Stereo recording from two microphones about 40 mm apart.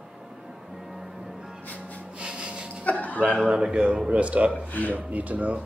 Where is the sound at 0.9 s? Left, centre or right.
Centre.